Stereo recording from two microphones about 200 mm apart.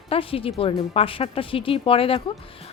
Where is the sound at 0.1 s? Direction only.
30° left (ahead or behind).